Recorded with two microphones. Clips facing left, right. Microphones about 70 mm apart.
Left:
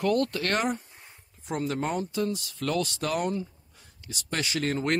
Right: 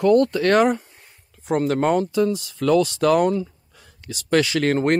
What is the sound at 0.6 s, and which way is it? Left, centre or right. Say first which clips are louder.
Speech: right 11 dB; right.